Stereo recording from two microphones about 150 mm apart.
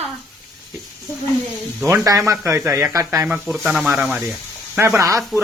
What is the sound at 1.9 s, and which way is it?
Speech, 20° right (ahead or behind).